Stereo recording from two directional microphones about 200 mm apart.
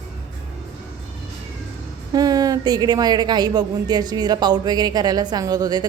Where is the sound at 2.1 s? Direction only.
20° right (ahead or behind).